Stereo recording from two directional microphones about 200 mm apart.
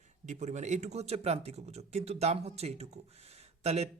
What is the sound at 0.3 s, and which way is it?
Speech, 35° right (ahead or behind).